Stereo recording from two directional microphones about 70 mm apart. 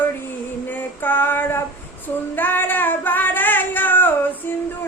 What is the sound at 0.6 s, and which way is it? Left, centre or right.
Female singing, left.